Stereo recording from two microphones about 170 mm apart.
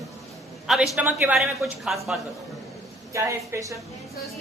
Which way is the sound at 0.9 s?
10° right (ahead or behind).